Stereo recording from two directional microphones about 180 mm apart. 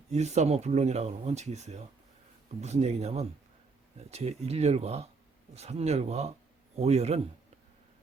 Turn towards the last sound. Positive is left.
turn(degrees=-35)  # may be behind; listen again after turning